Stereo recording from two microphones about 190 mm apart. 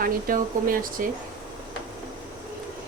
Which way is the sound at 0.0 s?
45° right (ahead or behind).